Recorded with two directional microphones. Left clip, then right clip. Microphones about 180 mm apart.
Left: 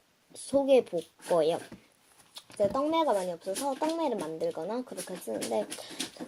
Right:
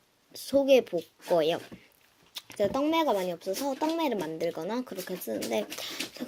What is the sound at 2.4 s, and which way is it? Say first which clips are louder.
Speech: even; 20° right (ahead or behind).